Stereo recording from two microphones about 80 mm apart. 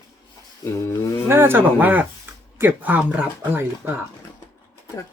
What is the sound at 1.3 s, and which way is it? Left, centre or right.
Speech, right.